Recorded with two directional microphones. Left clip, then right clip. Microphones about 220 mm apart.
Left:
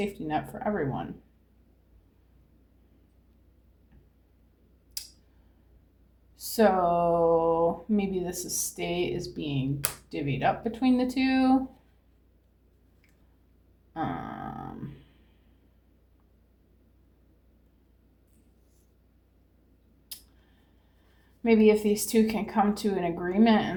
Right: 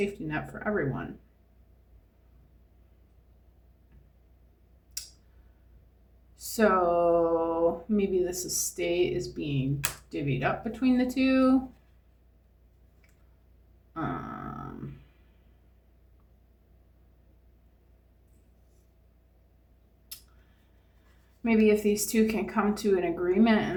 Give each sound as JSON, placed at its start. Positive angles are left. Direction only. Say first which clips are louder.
{"t": 0.3, "sound": "speech", "louder": "left 2 dB", "side_deg": 30}
{"t": 6.3, "sound": "speech", "louder": "left 1 dB", "side_deg": 30}
{"t": 13.9, "sound": "speech", "louder": "left 1 dB", "side_deg": 30}
{"t": 21.4, "sound": "speech", "louder": "left 2 dB", "side_deg": 30}